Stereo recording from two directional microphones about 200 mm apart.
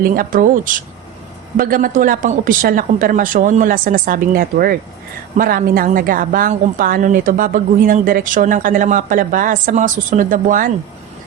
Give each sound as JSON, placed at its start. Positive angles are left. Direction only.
{"t": 0.0, "sound": "a woman's voice", "side_deg": -45}